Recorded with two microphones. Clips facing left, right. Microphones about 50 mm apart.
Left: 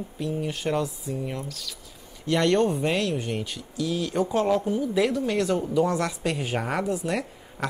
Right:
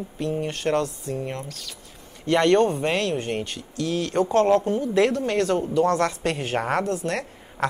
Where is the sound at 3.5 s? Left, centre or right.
Centre.